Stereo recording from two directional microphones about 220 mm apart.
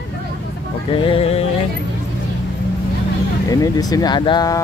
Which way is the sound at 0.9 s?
25° left (ahead or behind).